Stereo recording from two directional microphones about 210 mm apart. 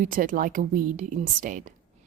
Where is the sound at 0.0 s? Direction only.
40° right (ahead or behind).